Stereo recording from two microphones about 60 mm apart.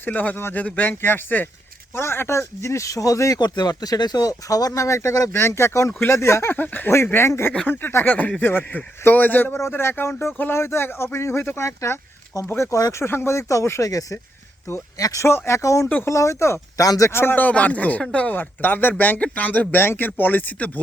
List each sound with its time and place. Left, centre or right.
0.0 s speech: left
0.3 s speech: left
2.0 s speech: left
5.3 s speech: left
6.9 s speech: left
9.6 s speech: left
12.5 s speech: left
14.9 s speech: left
15.2 s speech: left
17.1 s speech: left
17.4 s speech: left
18.3 s speech: left